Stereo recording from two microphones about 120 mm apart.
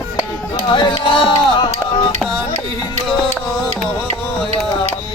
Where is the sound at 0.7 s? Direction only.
45° left (ahead or behind).